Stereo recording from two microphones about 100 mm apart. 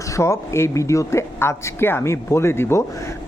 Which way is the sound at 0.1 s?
30° left (ahead or behind).